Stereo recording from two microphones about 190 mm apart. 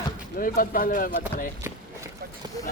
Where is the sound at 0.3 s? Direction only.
50° left (ahead or behind).